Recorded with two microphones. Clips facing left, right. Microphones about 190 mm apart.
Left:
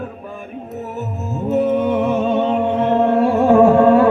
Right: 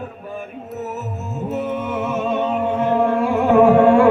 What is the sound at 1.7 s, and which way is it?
Music, 35° left (ahead or behind).